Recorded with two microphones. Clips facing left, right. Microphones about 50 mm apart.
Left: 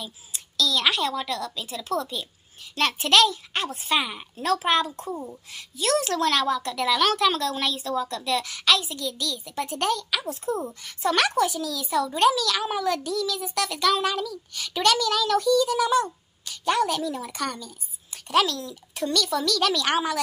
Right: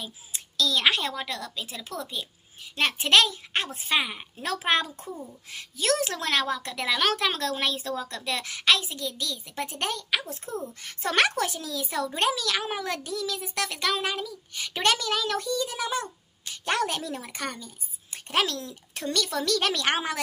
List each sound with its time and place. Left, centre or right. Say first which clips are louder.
0.0 s a child's voice: left 1 dB; right
4.5 s a child's voice: left 3 dB; right
6.0 s a child's voice: left 4 dB; right
10.7 s a child's voice: left 4 dB; right
16.7 s a woman's voice: left 2 dB; right